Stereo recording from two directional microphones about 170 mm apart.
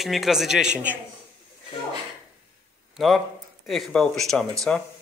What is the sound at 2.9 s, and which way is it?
Speech, centre (ahead or behind).